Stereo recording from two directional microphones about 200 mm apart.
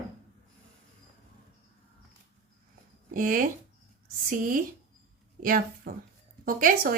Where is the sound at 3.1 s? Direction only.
40° right (ahead or behind).